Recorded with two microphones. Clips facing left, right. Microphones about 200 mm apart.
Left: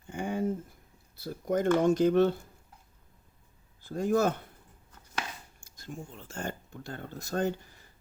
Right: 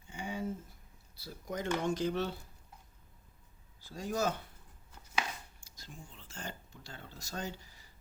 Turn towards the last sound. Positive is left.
turn(degrees=55)  # may be behind; listen again after turning